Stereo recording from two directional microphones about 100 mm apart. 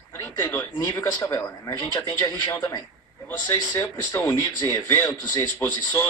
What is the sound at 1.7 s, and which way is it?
Speech, 30° left (ahead or behind).